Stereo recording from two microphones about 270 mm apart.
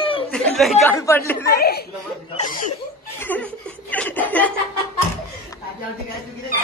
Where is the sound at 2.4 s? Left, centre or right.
Left.